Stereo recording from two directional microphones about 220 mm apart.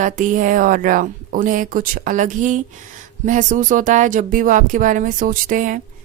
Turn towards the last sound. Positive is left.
turn(degrees=-35)  # may be behind; listen again after turning